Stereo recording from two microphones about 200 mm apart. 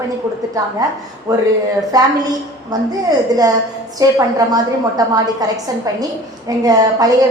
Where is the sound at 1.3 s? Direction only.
15° right (ahead or behind).